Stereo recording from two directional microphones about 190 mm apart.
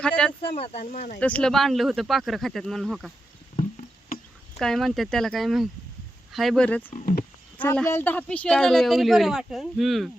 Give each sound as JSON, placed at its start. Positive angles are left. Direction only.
{"t": 0.0, "sound": "a woman's voice", "side_deg": 5}
{"t": 0.4, "sound": "speech", "side_deg": 30}
{"t": 1.2, "sound": "a woman's voice", "side_deg": 5}
{"t": 4.5, "sound": "a woman's voice", "side_deg": 0}
{"t": 6.9, "sound": "speech", "side_deg": 50}
{"t": 7.6, "sound": "a woman's voice", "side_deg": 10}